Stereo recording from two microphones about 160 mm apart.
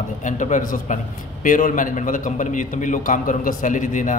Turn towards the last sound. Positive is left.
turn(degrees=50)  # may be behind; listen again after turning